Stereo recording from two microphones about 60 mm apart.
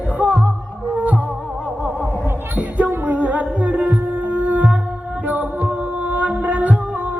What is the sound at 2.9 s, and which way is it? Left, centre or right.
Music, right.